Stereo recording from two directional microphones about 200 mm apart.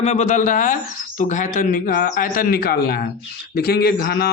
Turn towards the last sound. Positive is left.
turn(degrees=50)  # may be behind; listen again after turning